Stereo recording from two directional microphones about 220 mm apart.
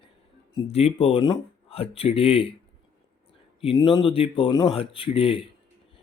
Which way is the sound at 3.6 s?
25° left (ahead or behind).